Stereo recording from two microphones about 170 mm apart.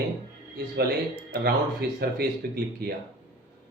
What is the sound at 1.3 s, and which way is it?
A man's voice, 70° right (ahead or behind).